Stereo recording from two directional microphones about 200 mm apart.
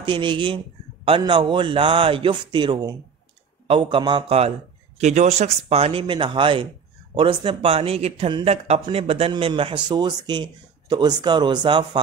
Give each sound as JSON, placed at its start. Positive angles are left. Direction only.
{"t": 0.0, "sound": "a man's voice", "side_deg": -25}